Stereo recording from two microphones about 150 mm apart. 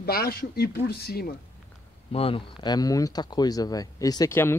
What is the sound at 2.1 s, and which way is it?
Speech, 40° left (ahead or behind).